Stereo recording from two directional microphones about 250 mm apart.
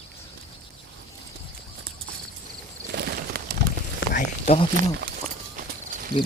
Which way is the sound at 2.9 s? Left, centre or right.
Right.